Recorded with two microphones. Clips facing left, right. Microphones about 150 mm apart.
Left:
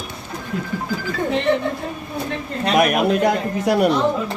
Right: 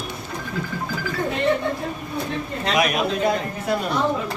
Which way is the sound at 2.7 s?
55° left (ahead or behind).